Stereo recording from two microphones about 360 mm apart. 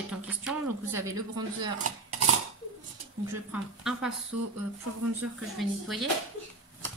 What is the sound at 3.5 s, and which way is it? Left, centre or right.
Speech, centre.